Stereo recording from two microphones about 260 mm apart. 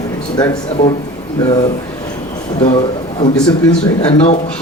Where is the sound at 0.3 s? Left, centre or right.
Centre.